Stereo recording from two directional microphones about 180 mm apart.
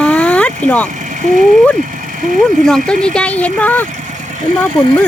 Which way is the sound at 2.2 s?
45° right (ahead or behind).